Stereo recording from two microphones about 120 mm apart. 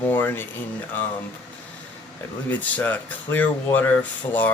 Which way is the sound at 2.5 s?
15° left (ahead or behind).